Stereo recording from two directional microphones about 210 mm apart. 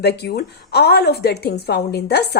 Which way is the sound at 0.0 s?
50° left (ahead or behind).